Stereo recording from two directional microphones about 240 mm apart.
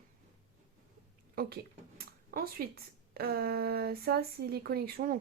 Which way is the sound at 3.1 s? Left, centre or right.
Right.